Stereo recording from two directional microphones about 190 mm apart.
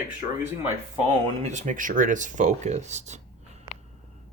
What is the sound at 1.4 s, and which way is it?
Speech, 40° right (ahead or behind).